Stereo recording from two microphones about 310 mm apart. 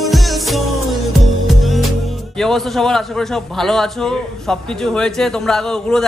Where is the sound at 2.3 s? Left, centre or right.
Centre.